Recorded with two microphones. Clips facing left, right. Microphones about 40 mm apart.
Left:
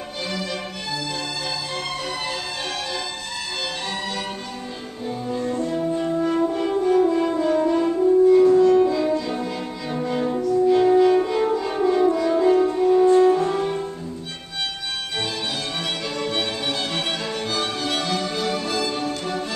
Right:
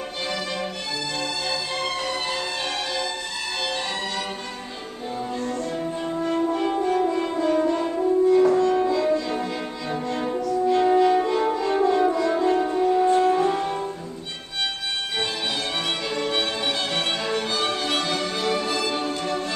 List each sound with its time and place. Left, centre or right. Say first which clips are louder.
0.3 s music: left 1 dB; centre
5.4 s music: left 5 dB; centre
5.7 s french horn: left 4 dB; centre
8.5 s music: left 4 dB; centre
10.9 s french horn: left 2 dB; centre
13.1 s music: left 3 dB; centre
16.2 s music: even; centre